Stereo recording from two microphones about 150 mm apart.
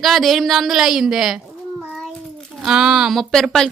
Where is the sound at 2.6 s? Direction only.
5° right (ahead or behind).